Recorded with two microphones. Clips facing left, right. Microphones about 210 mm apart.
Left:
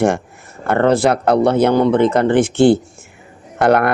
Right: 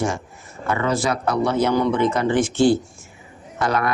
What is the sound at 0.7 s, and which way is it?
Speech, 60° left (ahead or behind).